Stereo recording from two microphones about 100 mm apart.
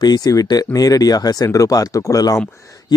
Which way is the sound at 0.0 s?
40° left (ahead or behind).